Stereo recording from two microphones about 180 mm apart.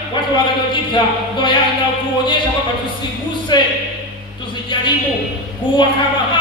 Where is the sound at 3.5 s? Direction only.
25° left (ahead or behind).